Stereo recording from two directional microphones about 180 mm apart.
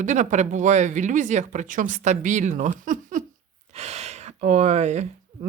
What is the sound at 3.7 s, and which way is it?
Speech, 35° right (ahead or behind).